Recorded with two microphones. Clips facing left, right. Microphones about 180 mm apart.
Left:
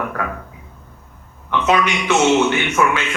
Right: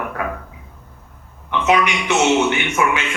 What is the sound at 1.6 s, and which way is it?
A man's voice, 20° right (ahead or behind).